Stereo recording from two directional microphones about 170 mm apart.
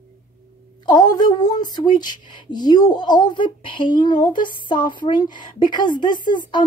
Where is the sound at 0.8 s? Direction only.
25° left (ahead or behind).